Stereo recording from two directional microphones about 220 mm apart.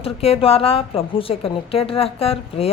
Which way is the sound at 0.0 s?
25° left (ahead or behind).